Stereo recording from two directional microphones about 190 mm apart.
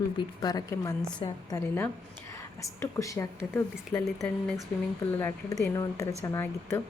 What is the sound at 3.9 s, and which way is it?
Speech, centre (ahead or behind).